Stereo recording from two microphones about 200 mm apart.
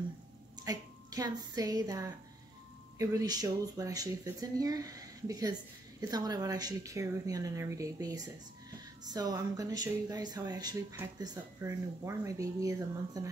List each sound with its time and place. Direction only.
0.7 s a woman's voice: 20° right (ahead or behind)